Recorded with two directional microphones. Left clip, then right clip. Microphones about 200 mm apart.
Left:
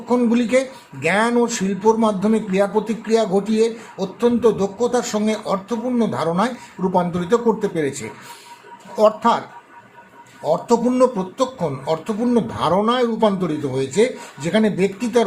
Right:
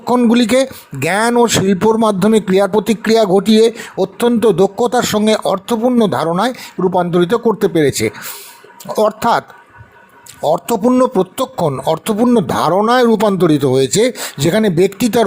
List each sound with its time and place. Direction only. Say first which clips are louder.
0.0 s speech: right 6 dB; 45° right (ahead or behind)
10.4 s speech: right 4 dB; 45° right (ahead or behind)